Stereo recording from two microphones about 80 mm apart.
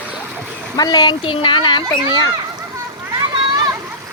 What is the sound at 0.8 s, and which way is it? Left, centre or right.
Speech, left.